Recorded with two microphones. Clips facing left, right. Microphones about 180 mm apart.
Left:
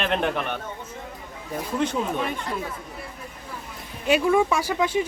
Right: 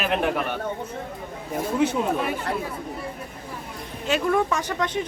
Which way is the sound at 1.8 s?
5° right (ahead or behind).